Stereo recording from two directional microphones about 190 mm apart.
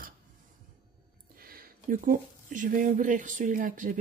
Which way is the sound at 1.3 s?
50° right (ahead or behind).